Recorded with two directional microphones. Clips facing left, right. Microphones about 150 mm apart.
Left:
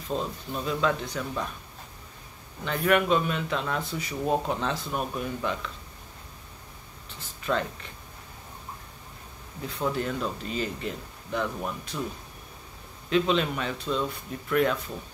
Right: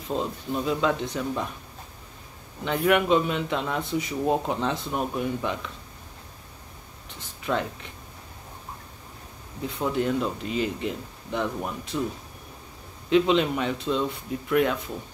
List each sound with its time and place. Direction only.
0.1 s speech: 20° right (ahead or behind)
2.6 s speech: 15° right (ahead or behind)
7.5 s speech: 5° right (ahead or behind)
9.8 s speech: 15° right (ahead or behind)
13.1 s speech: 20° right (ahead or behind)